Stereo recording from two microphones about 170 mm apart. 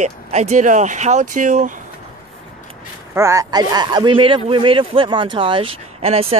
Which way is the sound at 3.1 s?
15° right (ahead or behind).